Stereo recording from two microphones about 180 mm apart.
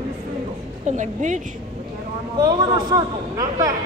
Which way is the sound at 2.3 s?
20° right (ahead or behind).